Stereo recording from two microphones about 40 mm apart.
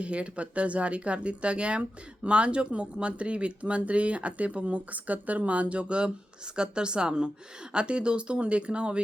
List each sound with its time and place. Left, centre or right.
0.0 s speech: right